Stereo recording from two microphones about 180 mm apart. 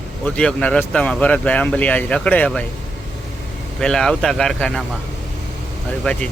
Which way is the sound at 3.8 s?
5° left (ahead or behind).